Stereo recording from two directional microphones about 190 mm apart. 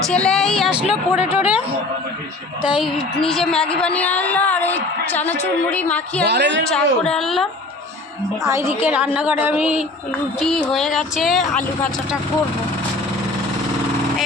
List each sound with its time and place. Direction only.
0.1 s speech: 5° left (ahead or behind)
2.6 s a woman's voice: centre (ahead or behind)
6.2 s a woman's voice: 65° right (ahead or behind)
6.7 s speech: 5° left (ahead or behind)
8.4 s speech: 15° right (ahead or behind); by 11.9 s 5° left (ahead or behind)